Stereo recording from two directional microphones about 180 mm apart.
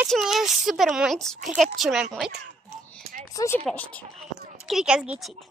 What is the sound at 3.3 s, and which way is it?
Speech, 15° left (ahead or behind).